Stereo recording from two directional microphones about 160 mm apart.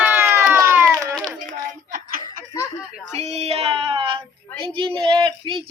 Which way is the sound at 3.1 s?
45° right (ahead or behind).